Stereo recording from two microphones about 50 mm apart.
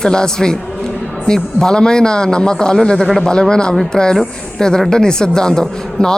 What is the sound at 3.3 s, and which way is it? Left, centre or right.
Speech, centre.